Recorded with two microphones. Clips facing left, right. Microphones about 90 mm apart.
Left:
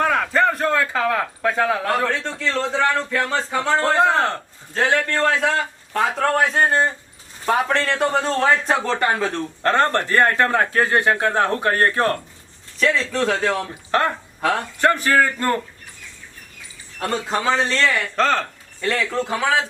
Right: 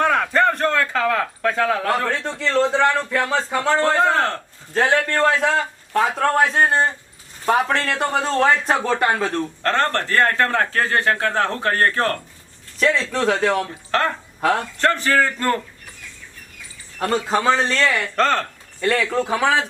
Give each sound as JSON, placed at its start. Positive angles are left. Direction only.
{"t": 0.0, "sound": "a man's voice", "side_deg": 0}
{"t": 3.8, "sound": "a man's voice", "side_deg": 20}
{"t": 4.7, "sound": "speech", "side_deg": -5}
{"t": 9.6, "sound": "a man's voice", "side_deg": 15}
{"t": 12.8, "sound": "speech", "side_deg": 0}
{"t": 13.7, "sound": "a man's voice", "side_deg": 15}
{"t": 17.0, "sound": "speech", "side_deg": 0}